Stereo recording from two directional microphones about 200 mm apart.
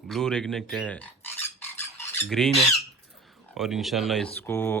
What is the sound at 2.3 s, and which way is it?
Speech, centre (ahead or behind).